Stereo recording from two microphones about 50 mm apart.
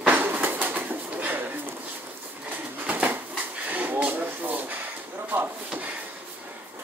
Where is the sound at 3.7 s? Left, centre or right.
Right.